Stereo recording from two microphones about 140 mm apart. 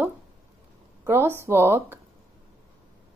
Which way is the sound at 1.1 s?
15° right (ahead or behind).